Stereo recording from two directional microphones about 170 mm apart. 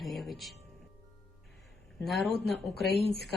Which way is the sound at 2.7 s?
70° left (ahead or behind).